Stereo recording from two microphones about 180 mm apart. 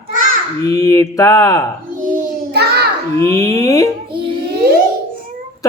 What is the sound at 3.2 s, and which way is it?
Speech, 20° left (ahead or behind).